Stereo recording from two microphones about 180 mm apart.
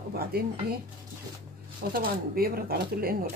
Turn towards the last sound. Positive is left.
turn(degrees=-55)  # may be behind; listen again after turning